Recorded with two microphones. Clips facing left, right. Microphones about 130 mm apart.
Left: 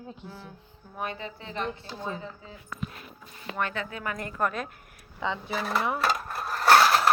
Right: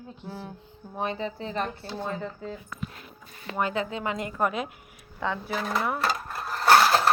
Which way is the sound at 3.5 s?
15° right (ahead or behind).